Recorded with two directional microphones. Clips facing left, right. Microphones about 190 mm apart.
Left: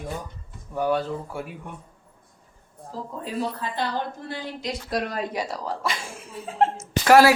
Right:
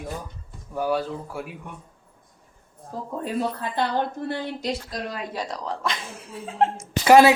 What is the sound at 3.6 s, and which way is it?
Speech, 55° right (ahead or behind).